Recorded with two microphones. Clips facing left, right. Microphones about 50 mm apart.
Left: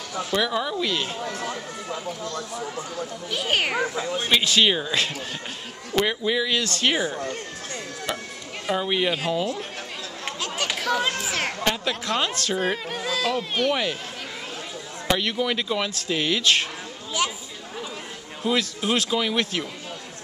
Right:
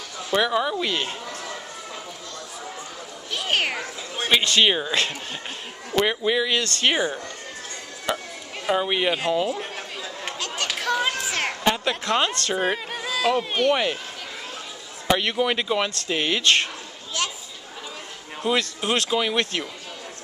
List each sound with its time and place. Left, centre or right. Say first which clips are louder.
0.3 s speech: right 3 dB; centre
3.3 s speech: even; centre
4.6 s speech: right 1 dB; centre
5.9 s speech: right 1 dB; centre
8.6 s speech: right 2 dB; centre
10.2 s chatter: left 1 dB; centre
11.6 s speech: right 2 dB; centre
12.3 s speech: even; centre
12.5 s speech: right 1 dB; centre
15.0 s speech: right 2 dB; centre
17.1 s speech: left 2 dB; centre
18.4 s speech: right 1 dB; centre